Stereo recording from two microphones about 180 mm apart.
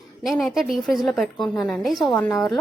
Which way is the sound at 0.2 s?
Centre (ahead or behind).